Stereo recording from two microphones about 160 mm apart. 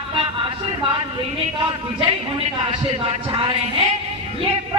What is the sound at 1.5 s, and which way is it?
A man's voice, 30° right (ahead or behind).